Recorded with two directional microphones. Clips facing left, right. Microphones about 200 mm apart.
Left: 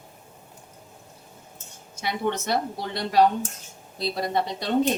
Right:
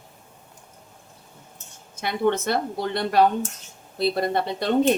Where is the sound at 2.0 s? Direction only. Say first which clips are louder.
Right 4 dB; 55° right (ahead or behind).